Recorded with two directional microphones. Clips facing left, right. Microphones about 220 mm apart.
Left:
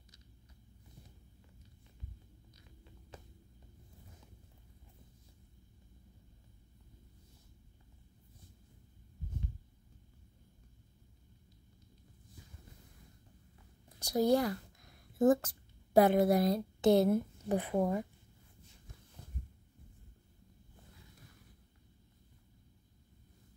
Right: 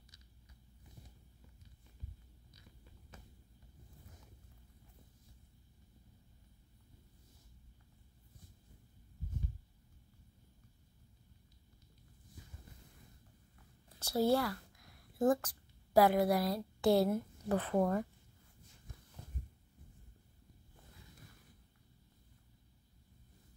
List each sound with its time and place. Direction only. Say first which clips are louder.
13.9 s speech: left 2 dB; 15° left (ahead or behind)